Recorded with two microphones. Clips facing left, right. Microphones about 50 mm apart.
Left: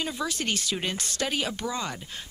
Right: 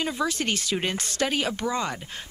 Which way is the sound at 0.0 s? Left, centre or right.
Right.